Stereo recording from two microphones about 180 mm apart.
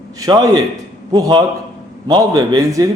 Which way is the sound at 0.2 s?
25° right (ahead or behind).